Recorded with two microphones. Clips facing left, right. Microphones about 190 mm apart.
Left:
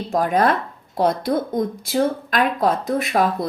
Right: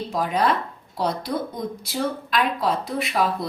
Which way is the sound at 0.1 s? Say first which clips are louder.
Left 5 dB; 45° left (ahead or behind).